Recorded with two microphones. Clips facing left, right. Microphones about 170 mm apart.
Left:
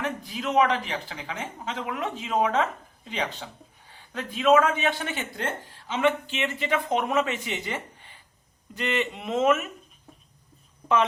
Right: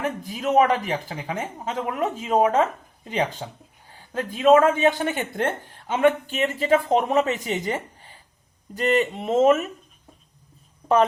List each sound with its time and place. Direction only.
0.0 s speech: 45° right (ahead or behind)